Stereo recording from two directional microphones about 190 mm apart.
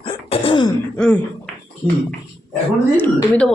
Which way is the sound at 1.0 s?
5° left (ahead or behind).